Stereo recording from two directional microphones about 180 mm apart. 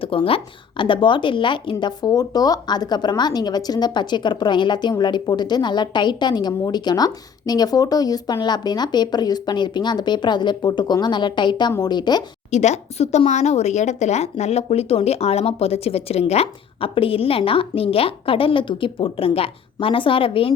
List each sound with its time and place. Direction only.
0.0 s speech: 30° left (ahead or behind)
12.5 s speech: 40° left (ahead or behind)